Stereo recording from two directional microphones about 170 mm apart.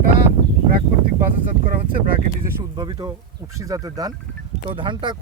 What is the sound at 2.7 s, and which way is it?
Speech, 25° right (ahead or behind).